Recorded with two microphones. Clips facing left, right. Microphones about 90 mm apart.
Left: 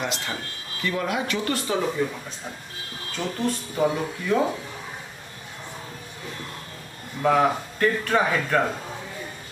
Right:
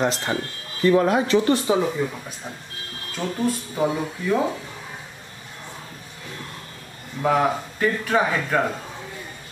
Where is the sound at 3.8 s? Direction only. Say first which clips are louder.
Left 1 dB; 5° right (ahead or behind).